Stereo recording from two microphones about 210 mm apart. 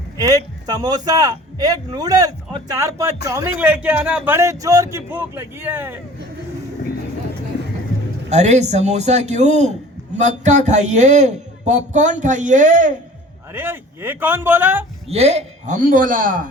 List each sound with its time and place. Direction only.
0.2 s a man's voice: 15° right (ahead or behind)
8.3 s a man's voice: 35° right (ahead or behind)
13.5 s a man's voice: 10° right (ahead or behind)
15.1 s a man's voice: 30° right (ahead or behind)